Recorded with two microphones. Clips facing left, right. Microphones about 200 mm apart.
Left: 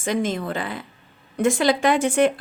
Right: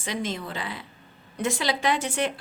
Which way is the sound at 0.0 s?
50° left (ahead or behind).